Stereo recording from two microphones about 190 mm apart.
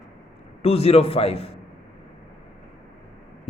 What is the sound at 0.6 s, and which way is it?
Speech, 30° left (ahead or behind).